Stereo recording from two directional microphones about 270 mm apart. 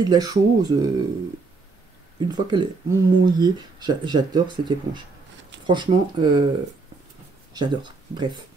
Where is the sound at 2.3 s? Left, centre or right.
Centre.